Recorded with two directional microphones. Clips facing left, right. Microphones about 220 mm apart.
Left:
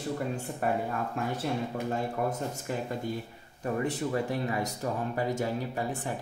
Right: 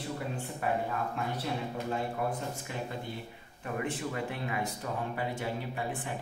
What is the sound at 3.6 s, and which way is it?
Speech, 40° left (ahead or behind).